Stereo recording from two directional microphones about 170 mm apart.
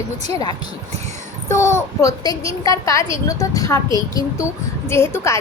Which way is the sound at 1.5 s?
15° left (ahead or behind).